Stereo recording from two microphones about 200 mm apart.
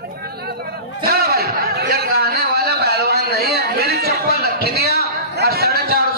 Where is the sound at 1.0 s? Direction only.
50° right (ahead or behind).